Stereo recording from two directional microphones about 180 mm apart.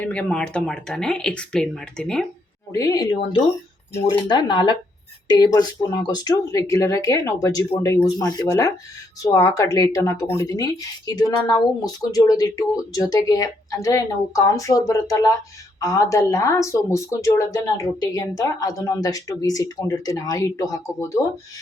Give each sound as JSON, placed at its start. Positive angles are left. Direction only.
{"t": 0.0, "sound": "speech", "side_deg": 5}
{"t": 2.7, "sound": "speech", "side_deg": 20}